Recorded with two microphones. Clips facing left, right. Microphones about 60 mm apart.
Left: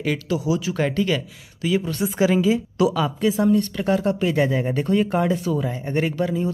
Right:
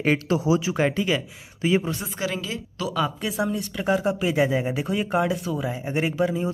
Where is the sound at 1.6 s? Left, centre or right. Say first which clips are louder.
Even; right.